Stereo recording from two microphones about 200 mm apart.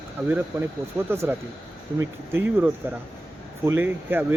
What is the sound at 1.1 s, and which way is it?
Speech, 15° right (ahead or behind).